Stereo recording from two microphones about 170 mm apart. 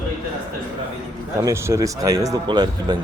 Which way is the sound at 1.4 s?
15° right (ahead or behind).